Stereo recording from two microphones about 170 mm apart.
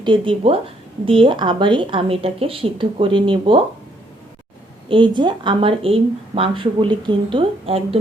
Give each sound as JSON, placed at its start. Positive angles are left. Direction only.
{"t": 0.0, "sound": "speech", "side_deg": -30}
{"t": 4.9, "sound": "a woman's voice", "side_deg": -30}